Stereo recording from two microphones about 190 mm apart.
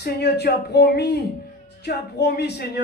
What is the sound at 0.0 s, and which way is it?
A man's voice, 60° left (ahead or behind).